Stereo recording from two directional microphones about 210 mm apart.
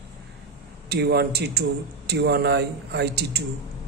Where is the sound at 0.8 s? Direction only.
50° right (ahead or behind).